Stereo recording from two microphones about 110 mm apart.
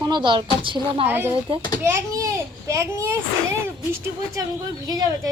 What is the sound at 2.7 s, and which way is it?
A child's voice, 25° right (ahead or behind).